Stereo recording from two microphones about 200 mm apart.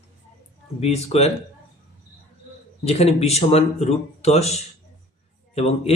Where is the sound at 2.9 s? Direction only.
30° left (ahead or behind).